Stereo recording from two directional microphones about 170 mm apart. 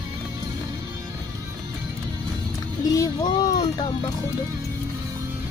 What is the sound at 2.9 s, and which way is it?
Speech, 20° left (ahead or behind).